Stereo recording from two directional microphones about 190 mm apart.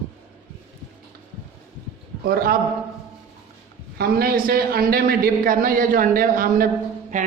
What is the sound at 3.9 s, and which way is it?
A man's voice, 50° right (ahead or behind).